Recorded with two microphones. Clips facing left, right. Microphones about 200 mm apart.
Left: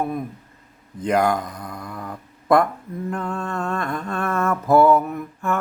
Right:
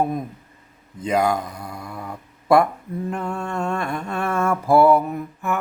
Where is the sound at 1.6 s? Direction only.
25° right (ahead or behind).